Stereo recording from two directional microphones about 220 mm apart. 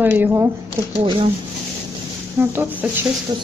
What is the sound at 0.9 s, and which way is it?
Speech, 25° right (ahead or behind).